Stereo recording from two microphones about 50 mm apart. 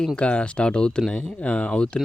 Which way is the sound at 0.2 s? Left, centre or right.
Left.